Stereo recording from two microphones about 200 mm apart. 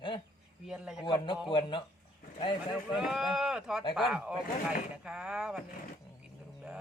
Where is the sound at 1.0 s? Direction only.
25° left (ahead or behind).